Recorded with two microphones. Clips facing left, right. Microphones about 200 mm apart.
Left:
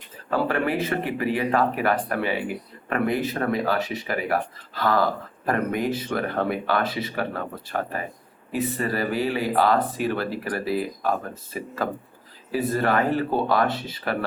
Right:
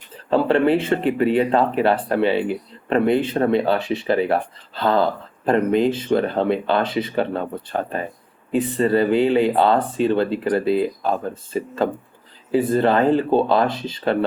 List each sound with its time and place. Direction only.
0.3 s speech: 30° right (ahead or behind)
8.6 s speech: 25° right (ahead or behind)